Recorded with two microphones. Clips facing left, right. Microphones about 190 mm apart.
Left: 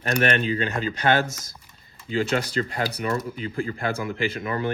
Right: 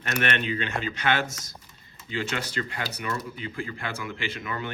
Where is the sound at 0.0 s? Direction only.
35° left (ahead or behind).